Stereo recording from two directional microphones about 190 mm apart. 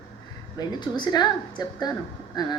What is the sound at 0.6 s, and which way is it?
Speech, 20° left (ahead or behind).